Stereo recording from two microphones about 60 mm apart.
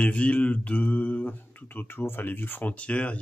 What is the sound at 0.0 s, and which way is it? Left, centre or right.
Speech, left.